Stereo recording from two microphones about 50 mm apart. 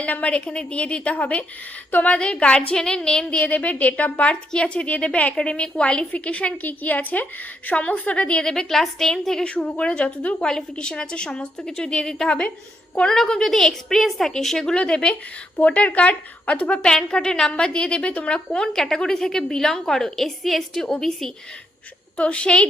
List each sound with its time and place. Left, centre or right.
0.0 s a woman's voice: left
2.1 s a woman's voice: left
3.5 s a woman's voice: left
8.4 s a woman's voice: centre
9.4 s a woman's voice: left; by 14.6 s centre
14.6 s a woman's voice: centre
15.5 s a woman's voice: left; by 21.2 s centre
22.2 s a woman's voice: left